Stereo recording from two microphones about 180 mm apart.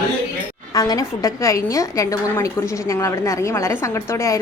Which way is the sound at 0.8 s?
20° left (ahead or behind).